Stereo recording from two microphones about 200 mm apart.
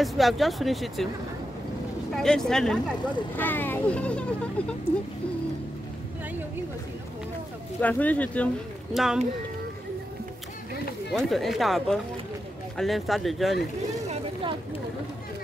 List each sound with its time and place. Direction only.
0.0 s speech: centre (ahead or behind)
2.1 s speech: centre (ahead or behind)
7.8 s speech: 10° left (ahead or behind)
11.1 s speech: centre (ahead or behind)
14.0 s a sound: 30° right (ahead or behind)